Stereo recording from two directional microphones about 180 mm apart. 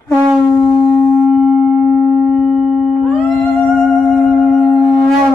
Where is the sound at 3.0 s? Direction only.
5° left (ahead or behind).